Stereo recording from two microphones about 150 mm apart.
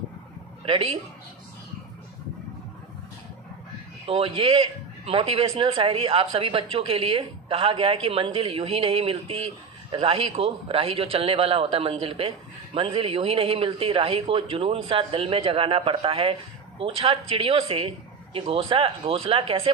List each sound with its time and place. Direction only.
0.6 s speech: 40° right (ahead or behind)
4.0 s a man's voice: 40° right (ahead or behind)